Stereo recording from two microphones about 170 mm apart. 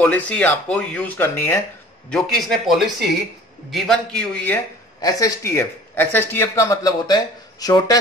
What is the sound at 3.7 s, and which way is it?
Speech, 5° left (ahead or behind).